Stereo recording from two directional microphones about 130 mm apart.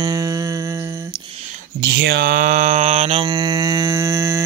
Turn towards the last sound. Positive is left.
turn(degrees=-20)  # may be behind; listen again after turning